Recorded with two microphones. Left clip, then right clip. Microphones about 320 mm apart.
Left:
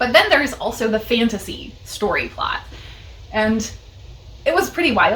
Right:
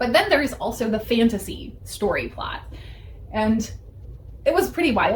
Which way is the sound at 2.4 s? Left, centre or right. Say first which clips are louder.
Left 8 dB; centre.